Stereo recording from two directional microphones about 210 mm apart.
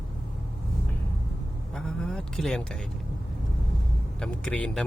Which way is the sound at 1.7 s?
5° left (ahead or behind).